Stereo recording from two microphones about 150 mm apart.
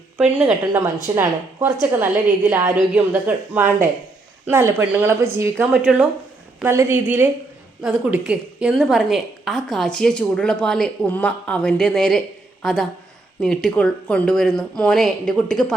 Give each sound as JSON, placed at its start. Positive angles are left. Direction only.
{"t": 0.2, "sound": "a woman's voice", "side_deg": -5}
{"t": 1.1, "sound": "a woman's voice", "side_deg": -20}